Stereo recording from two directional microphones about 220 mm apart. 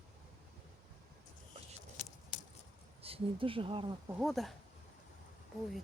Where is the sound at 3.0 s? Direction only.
25° right (ahead or behind).